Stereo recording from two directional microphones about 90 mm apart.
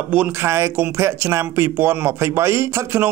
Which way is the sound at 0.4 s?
30° right (ahead or behind).